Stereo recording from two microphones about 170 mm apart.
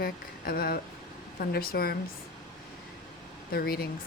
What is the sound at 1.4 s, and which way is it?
Speech, 60° left (ahead or behind).